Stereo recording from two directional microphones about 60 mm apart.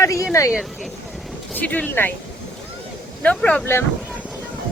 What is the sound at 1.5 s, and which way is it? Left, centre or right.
Speech, left.